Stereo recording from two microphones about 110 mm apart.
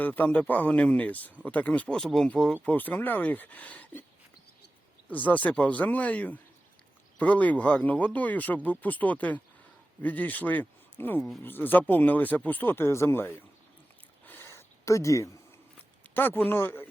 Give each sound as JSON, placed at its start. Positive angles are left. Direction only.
{"t": 0.0, "sound": "speech", "side_deg": 15}
{"t": 5.0, "sound": "speech", "side_deg": 15}
{"t": 14.3, "sound": "a sound", "side_deg": 20}
{"t": 16.1, "sound": "speech", "side_deg": 20}